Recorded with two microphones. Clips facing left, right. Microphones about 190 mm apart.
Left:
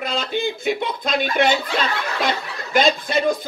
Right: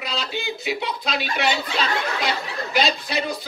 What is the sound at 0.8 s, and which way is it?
Speech, 50° left (ahead or behind).